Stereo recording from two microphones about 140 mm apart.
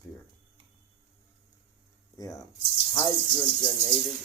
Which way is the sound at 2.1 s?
25° left (ahead or behind).